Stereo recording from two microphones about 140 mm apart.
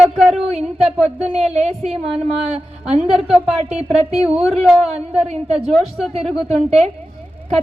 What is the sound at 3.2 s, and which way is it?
Speech, 5° right (ahead or behind).